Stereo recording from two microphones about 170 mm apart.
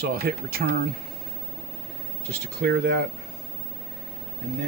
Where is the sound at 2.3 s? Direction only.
70° right (ahead or behind).